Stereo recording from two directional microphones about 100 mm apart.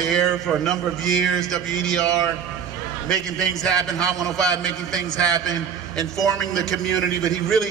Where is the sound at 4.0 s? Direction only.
35° right (ahead or behind).